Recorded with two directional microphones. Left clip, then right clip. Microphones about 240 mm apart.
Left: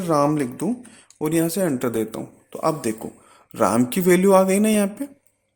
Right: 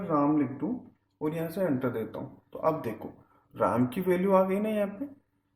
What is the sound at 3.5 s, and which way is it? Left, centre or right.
Speech, left.